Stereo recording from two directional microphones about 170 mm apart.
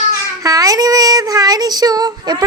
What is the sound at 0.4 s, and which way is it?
Child singing, 20° right (ahead or behind).